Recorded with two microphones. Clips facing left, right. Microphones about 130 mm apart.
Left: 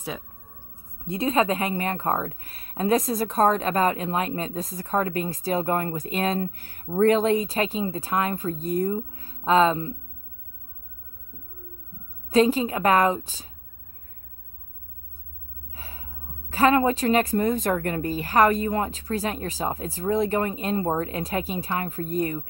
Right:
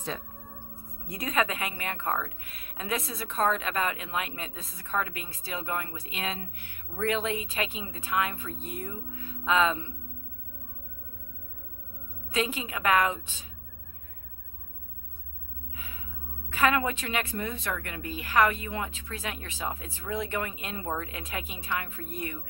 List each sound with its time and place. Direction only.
0.9 s speech: 25° left (ahead or behind)
12.3 s speech: 35° left (ahead or behind)
15.7 s speech: 35° left (ahead or behind)